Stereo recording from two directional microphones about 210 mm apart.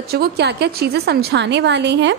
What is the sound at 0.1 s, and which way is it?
A woman's voice, 50° right (ahead or behind).